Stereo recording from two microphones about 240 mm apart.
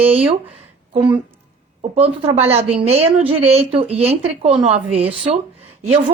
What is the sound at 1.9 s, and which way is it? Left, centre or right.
A woman's voice, right.